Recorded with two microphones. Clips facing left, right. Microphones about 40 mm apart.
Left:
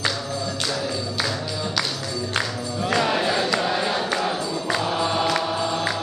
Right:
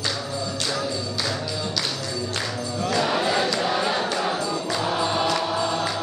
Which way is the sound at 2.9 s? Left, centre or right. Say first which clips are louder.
Left 2 dB; left.